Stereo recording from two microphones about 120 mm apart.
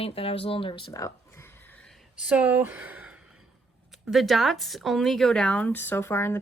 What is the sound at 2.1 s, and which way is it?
Speech, 5° right (ahead or behind).